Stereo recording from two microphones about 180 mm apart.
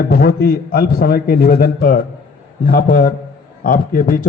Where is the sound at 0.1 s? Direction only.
55° left (ahead or behind).